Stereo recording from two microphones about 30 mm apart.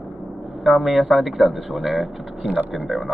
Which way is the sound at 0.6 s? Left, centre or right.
Centre.